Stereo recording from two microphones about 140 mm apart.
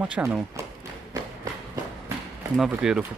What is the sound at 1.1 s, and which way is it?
Run, 25° right (ahead or behind).